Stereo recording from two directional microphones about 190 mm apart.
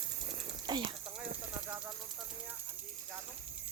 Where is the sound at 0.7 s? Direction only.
25° right (ahead or behind).